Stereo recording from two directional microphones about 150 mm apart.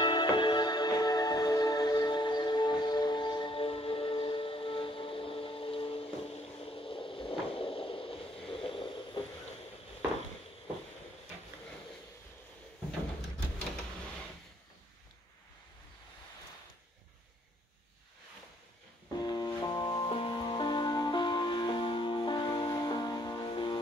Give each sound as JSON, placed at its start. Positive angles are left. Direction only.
{"t": 0.0, "sound": "music", "side_deg": 30}
{"t": 19.2, "sound": "music", "side_deg": 25}